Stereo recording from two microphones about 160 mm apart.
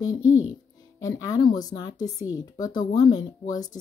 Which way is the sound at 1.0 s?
20° left (ahead or behind).